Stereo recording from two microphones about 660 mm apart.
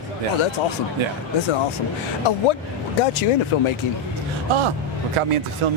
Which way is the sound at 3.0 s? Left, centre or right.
Left.